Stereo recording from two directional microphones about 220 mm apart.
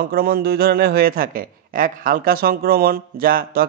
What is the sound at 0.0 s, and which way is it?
A man's voice, 45° right (ahead or behind).